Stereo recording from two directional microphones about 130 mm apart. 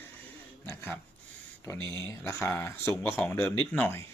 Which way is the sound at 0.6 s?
15° left (ahead or behind).